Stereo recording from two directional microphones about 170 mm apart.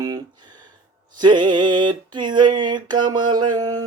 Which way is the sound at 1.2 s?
25° right (ahead or behind).